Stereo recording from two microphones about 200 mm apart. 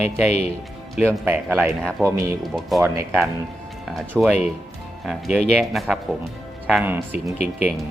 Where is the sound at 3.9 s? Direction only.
Centre (ahead or behind).